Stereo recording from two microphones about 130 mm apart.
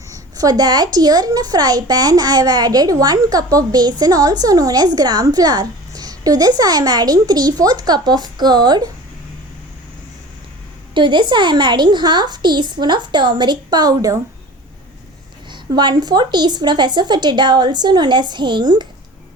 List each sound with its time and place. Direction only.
0.1 s a woman's voice: 30° right (ahead or behind)
10.9 s a woman's voice: 35° right (ahead or behind)
15.7 s a woman's voice: 35° right (ahead or behind)